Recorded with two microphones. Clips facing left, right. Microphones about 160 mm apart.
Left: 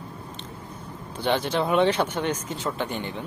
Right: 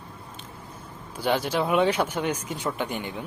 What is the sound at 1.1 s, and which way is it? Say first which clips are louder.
Speech: even; 10° right (ahead or behind).